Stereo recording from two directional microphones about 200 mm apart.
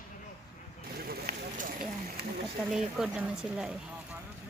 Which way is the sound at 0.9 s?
50° right (ahead or behind).